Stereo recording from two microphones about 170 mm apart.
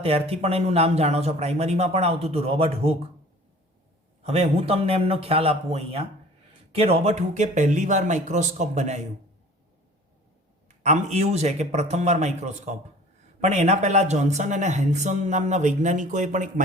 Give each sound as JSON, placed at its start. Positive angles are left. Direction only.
{"t": 0.0, "sound": "a man's voice", "side_deg": -35}
{"t": 4.2, "sound": "a man's voice", "side_deg": -35}
{"t": 10.8, "sound": "a man's voice", "side_deg": -40}